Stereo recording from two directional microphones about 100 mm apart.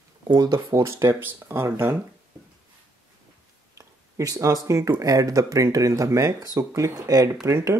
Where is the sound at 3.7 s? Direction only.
35° right (ahead or behind).